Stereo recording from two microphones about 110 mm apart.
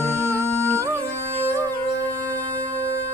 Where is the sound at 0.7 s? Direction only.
25° right (ahead or behind).